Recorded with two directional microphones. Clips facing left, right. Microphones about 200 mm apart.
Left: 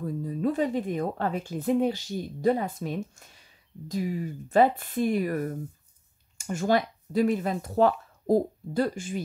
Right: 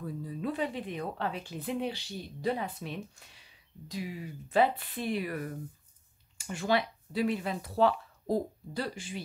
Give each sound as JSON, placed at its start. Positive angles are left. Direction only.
{"t": 0.0, "sound": "speech", "side_deg": 45}